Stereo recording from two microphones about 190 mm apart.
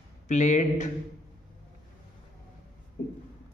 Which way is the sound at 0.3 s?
40° left (ahead or behind).